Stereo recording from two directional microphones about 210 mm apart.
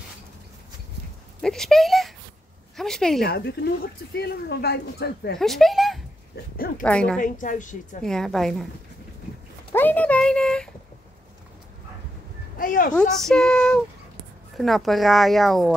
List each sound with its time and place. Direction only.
1.4 s speech: centre (ahead or behind)
2.7 s a sound: centre (ahead or behind)
3.2 s a woman's voice: 50° left (ahead or behind)
5.4 s speech: centre (ahead or behind)
6.3 s a woman's voice: 45° left (ahead or behind)
6.8 s speech: 5° left (ahead or behind)
7.2 s a woman's voice: 40° left (ahead or behind)
8.0 s speech: centre (ahead or behind)
9.8 s speech: 10° left (ahead or behind)
12.5 s speech: 40° left (ahead or behind)
13.2 s speech: 5° left (ahead or behind)